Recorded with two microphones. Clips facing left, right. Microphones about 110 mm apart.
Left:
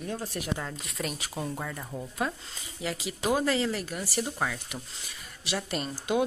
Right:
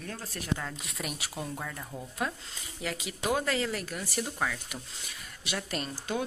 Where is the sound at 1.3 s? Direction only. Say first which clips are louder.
Left 3 dB; 5° left (ahead or behind).